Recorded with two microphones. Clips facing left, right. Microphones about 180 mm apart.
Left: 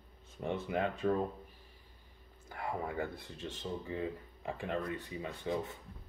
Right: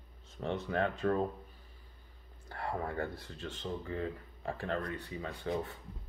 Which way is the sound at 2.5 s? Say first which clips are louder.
Right 1 dB; 10° left (ahead or behind).